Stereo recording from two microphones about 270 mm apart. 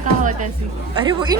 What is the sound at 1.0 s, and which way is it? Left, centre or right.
Speech, centre.